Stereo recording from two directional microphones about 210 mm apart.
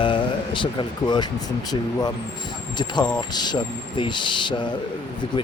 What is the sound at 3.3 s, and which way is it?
Speech, 20° left (ahead or behind).